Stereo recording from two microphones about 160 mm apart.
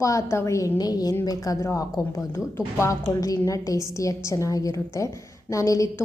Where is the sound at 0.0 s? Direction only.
20° left (ahead or behind).